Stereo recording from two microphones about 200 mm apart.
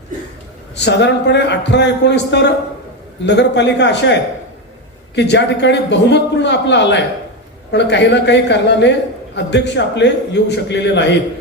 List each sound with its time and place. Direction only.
0.9 s a man's voice: 60° left (ahead or behind)
5.1 s a man's voice: 60° left (ahead or behind)